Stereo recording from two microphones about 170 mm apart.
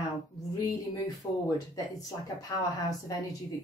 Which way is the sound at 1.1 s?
20° left (ahead or behind).